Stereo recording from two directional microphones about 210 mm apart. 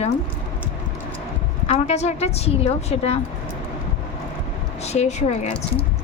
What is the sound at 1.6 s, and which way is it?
Speech, 30° left (ahead or behind).